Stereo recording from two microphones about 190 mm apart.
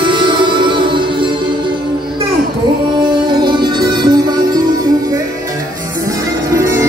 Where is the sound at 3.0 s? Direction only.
25° right (ahead or behind).